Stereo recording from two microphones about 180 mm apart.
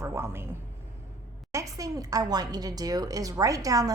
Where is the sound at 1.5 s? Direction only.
20° right (ahead or behind).